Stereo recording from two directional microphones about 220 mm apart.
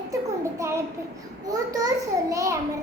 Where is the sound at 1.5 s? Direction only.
15° right (ahead or behind).